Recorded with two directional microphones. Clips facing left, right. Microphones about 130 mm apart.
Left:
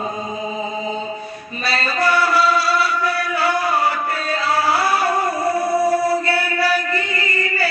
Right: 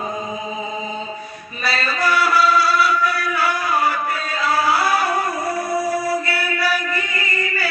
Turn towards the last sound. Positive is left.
turn(degrees=25)  # may be behind; listen again after turning